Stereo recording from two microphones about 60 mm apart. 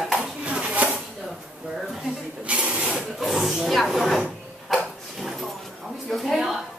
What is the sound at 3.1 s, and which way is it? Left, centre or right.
Speech, centre.